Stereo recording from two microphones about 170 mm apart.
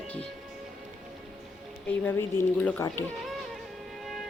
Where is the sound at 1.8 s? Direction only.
10° left (ahead or behind).